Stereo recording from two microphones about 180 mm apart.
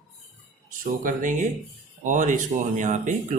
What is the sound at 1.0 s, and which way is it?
Speech, 45° right (ahead or behind).